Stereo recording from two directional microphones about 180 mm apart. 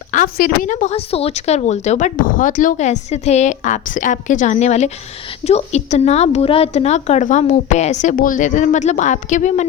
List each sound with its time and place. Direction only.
0.1 s a woman's voice: 50° left (ahead or behind)